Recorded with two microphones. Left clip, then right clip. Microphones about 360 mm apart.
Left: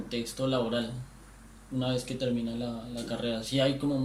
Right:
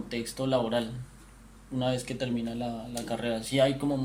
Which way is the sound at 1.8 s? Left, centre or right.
Right.